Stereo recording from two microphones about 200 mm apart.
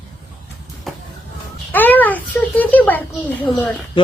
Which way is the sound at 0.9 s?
Centre (ahead or behind).